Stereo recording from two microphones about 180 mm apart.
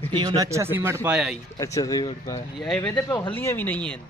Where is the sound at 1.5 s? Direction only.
20° left (ahead or behind).